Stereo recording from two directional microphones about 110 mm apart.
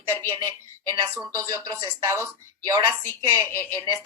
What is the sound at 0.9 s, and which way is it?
Speech, 30° right (ahead or behind).